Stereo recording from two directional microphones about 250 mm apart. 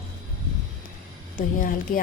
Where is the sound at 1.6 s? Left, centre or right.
Left.